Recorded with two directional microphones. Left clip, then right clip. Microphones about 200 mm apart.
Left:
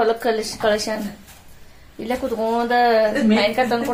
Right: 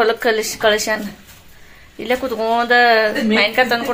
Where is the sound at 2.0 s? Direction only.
10° right (ahead or behind).